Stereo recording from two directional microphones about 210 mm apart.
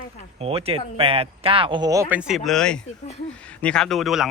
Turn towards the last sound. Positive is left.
turn(degrees=0)  # may be behind; listen again after turning